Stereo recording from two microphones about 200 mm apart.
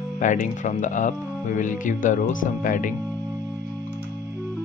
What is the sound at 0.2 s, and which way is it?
Speech, 40° left (ahead or behind).